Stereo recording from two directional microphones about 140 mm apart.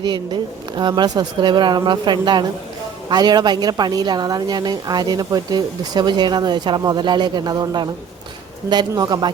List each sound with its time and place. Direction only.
0.0 s a woman's voice: 30° right (ahead or behind)